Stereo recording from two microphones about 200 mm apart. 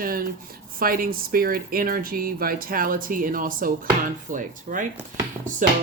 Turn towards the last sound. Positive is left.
turn(degrees=-40)  # may be behind; listen again after turning